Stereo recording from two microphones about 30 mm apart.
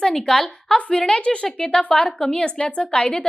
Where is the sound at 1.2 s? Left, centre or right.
Left.